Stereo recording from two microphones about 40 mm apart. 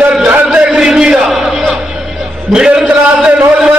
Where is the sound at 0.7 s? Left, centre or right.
Centre.